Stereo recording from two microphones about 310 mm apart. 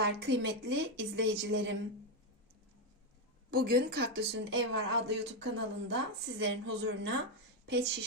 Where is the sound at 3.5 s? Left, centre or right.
Right.